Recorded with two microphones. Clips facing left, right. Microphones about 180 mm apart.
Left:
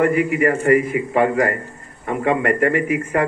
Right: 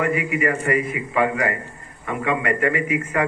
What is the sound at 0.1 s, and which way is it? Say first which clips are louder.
A man's voice: left 5 dB; 50° left (ahead or behind).